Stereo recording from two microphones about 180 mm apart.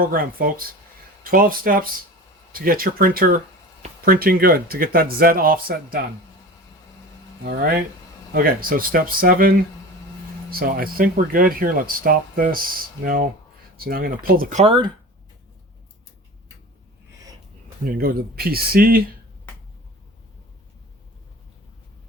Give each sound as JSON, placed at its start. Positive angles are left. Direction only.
{"t": 0.0, "sound": "speech", "side_deg": -50}
{"t": 8.3, "sound": "speech", "side_deg": -55}
{"t": 10.5, "sound": "speech", "side_deg": -55}
{"t": 17.8, "sound": "speech", "side_deg": -55}